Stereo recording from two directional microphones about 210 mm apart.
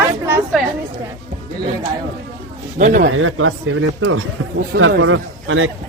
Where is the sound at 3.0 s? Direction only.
70° right (ahead or behind).